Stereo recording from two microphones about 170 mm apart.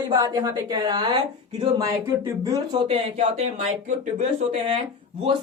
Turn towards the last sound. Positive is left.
turn(degrees=-35)  # may be behind; listen again after turning